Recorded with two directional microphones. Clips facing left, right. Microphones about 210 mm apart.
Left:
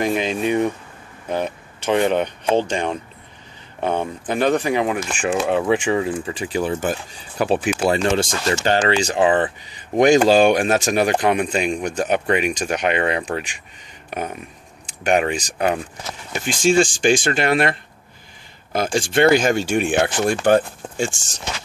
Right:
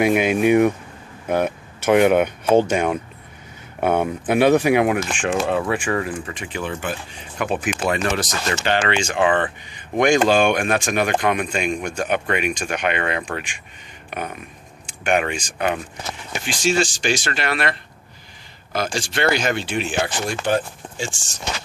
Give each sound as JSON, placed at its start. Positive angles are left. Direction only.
{"t": 0.0, "sound": "speech", "side_deg": -10}
{"t": 5.5, "sound": "speech", "side_deg": 15}
{"t": 6.0, "sound": "speech", "side_deg": 30}
{"t": 16.4, "sound": "speech", "side_deg": 50}